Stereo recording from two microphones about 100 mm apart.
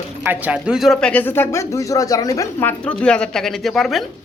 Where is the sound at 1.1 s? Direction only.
20° left (ahead or behind); by 2.4 s 35° left (ahead or behind).